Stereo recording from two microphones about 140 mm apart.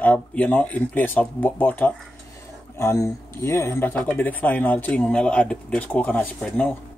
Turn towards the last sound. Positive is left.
turn(degrees=10)  # may be behind; listen again after turning